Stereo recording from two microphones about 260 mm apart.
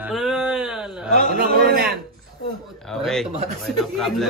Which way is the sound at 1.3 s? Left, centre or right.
Right.